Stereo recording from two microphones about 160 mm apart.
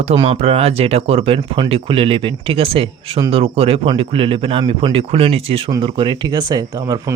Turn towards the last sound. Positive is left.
turn(degrees=-20)  # may be behind; listen again after turning